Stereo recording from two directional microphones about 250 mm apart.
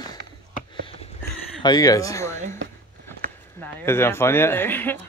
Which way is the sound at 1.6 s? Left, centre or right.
Centre.